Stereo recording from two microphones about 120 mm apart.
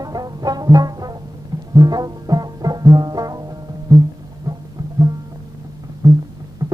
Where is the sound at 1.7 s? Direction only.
30° right (ahead or behind).